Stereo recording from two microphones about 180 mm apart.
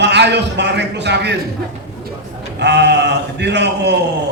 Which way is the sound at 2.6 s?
70° right (ahead or behind).